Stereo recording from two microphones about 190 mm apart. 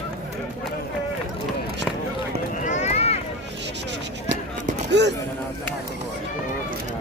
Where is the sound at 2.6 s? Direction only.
35° left (ahead or behind).